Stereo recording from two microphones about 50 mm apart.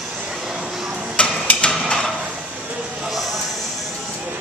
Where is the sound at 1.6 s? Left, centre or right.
Centre.